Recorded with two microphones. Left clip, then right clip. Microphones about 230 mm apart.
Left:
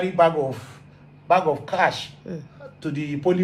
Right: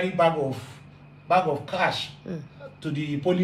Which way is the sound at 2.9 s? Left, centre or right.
Left.